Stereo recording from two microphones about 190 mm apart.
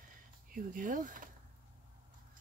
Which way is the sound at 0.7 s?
45° right (ahead or behind).